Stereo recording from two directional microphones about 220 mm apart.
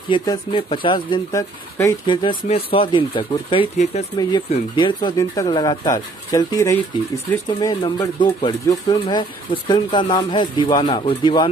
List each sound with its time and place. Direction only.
0.1 s speech: 20° left (ahead or behind)